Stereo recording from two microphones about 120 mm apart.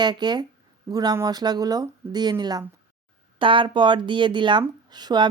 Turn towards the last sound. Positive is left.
turn(degrees=-35)  # may be behind; listen again after turning